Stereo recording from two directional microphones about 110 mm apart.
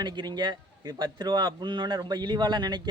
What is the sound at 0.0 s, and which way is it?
Speech, 40° right (ahead or behind).